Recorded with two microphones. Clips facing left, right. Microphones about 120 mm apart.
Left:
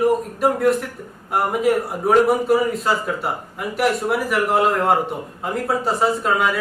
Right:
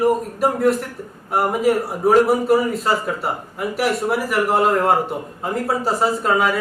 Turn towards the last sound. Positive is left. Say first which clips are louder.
# right 1 dB
turn(degrees=0)  # may be behind; listen again after turning